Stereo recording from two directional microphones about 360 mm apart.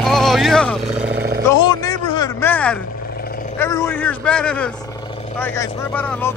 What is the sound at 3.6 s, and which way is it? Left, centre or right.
Speech, centre.